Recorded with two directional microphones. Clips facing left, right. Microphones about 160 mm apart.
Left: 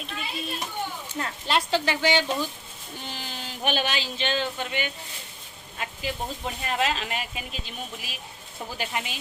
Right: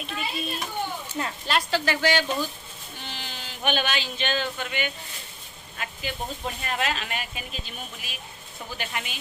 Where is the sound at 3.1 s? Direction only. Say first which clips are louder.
Left 2 dB; 40° left (ahead or behind).